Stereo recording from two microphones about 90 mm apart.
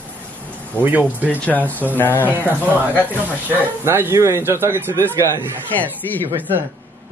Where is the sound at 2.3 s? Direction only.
20° right (ahead or behind).